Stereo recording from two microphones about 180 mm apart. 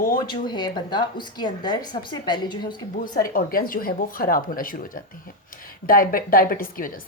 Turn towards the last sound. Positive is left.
turn(degrees=50)  # may be behind; listen again after turning